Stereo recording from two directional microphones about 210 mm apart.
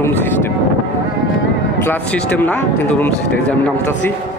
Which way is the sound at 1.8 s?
10° left (ahead or behind).